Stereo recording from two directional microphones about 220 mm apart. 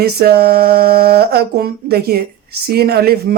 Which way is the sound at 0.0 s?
45° right (ahead or behind).